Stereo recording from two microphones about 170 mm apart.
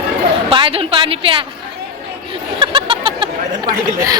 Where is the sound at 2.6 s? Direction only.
30° right (ahead or behind).